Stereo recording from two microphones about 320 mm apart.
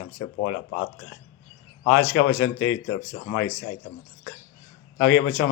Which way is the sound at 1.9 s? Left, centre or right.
Left.